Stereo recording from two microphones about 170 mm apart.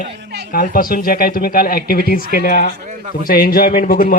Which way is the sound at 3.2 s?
60° left (ahead or behind).